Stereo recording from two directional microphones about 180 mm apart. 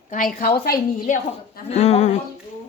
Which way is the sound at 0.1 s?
50° left (ahead or behind).